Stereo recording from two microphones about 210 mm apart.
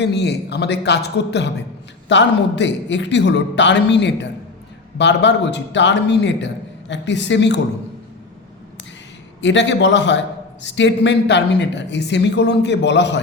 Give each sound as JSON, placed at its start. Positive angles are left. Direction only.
{"t": 0.0, "sound": "a man's voice", "side_deg": 55}
{"t": 9.4, "sound": "a man's voice", "side_deg": 60}